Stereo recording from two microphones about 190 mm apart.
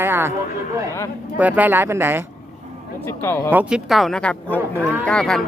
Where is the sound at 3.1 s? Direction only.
15° left (ahead or behind).